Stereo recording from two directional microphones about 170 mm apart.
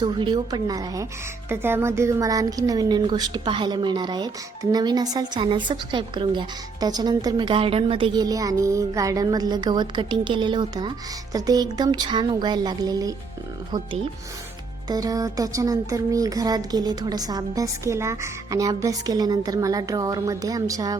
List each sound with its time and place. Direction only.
0.0 s a woman's voice: 25° right (ahead or behind)